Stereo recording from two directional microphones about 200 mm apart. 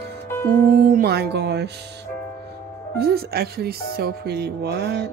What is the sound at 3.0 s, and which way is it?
Speech, 50° right (ahead or behind).